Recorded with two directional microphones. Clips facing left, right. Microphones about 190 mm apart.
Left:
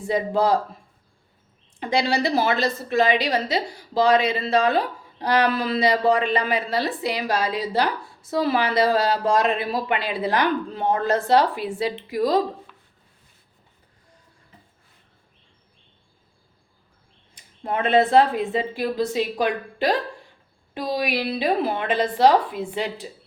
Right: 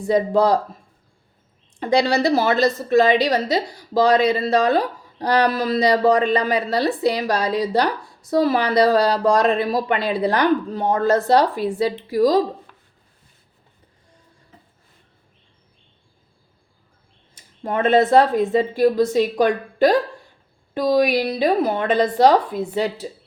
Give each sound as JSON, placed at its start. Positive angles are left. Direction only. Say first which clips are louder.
{"t": 0.1, "sound": "speech", "louder": "right 4 dB", "side_deg": -40}
{"t": 2.0, "sound": "speech", "louder": "right 3 dB", "side_deg": -40}
{"t": 12.7, "sound": "a sound", "louder": "even", "side_deg": -45}
{"t": 17.3, "sound": "speech", "louder": "right 3 dB", "side_deg": -40}